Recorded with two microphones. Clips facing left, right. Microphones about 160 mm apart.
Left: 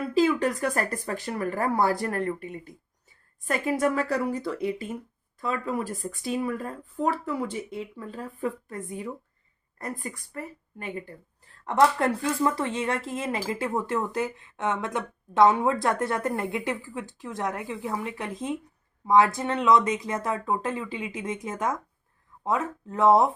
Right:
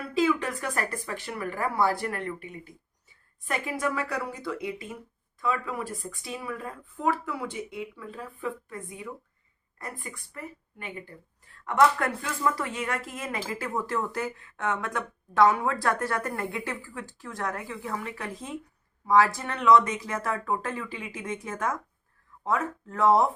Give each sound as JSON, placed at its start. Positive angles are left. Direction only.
{"t": 0.2, "sound": "a woman's voice", "side_deg": 40}